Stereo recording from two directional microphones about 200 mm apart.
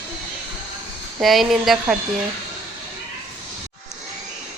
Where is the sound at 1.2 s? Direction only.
Centre (ahead or behind).